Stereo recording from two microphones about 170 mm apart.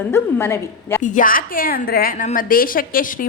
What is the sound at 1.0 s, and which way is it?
A woman's voice, 50° left (ahead or behind).